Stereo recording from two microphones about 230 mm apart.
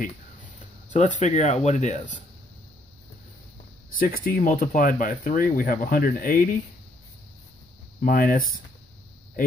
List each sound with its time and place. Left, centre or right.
0.9 s speech: left
4.0 s speech: left
8.0 s speech: left